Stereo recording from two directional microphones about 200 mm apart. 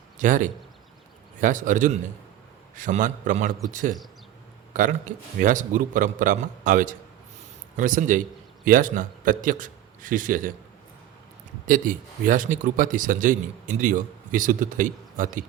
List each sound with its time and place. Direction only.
0.2 s a man's voice: 40° right (ahead or behind)
11.6 s speech: 40° right (ahead or behind)